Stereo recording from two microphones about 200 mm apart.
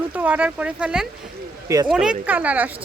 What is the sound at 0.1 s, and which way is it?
Speech, 10° right (ahead or behind).